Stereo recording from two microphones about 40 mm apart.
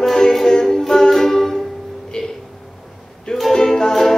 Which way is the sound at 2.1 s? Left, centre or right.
Centre.